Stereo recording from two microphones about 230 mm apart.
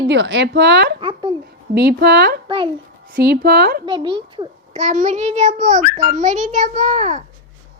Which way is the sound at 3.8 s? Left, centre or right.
Centre.